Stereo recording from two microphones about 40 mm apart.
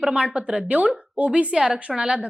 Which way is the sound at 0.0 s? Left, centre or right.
Right.